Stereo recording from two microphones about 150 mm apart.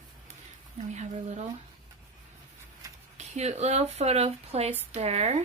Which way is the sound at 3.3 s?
45° right (ahead or behind).